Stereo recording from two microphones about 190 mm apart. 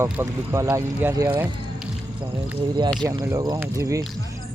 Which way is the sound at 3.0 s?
20° right (ahead or behind).